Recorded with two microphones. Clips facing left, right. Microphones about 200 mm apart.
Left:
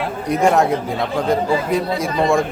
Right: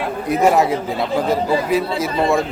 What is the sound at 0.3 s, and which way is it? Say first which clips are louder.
A man's voice: even; 5° right (ahead or behind).